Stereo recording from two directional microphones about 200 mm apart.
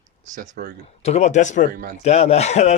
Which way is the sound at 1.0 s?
35° left (ahead or behind).